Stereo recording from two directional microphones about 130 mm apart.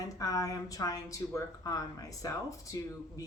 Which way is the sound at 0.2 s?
25° left (ahead or behind).